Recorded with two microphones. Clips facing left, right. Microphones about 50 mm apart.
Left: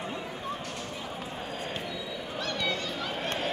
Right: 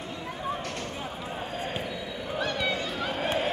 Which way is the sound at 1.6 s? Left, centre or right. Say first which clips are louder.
Right 3 dB; centre.